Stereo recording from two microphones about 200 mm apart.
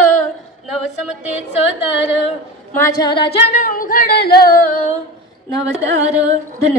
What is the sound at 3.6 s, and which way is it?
Speech, 45° left (ahead or behind).